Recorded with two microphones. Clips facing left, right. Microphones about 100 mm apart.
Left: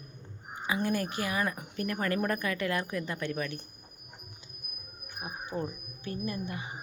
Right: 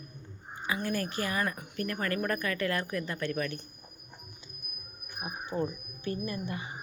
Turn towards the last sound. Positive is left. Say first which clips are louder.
# right 1 dB
turn(degrees=10)  # may be behind; listen again after turning